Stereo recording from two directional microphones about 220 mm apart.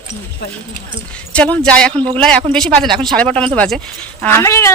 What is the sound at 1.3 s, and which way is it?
Speech, 5° left (ahead or behind).